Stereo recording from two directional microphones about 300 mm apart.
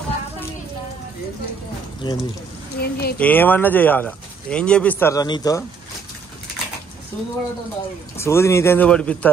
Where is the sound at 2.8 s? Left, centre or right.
Left.